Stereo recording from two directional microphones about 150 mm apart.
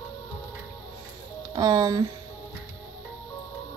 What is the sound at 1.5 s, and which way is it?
Speech, 30° right (ahead or behind).